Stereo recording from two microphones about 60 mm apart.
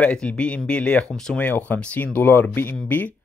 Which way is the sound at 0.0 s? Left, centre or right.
Centre.